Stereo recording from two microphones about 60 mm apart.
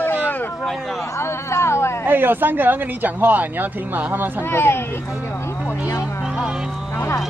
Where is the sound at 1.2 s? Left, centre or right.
Left.